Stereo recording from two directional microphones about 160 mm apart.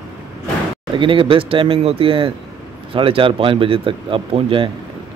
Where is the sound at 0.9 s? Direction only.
30° right (ahead or behind).